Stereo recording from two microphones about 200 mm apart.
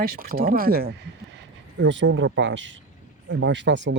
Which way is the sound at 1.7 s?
70° right (ahead or behind).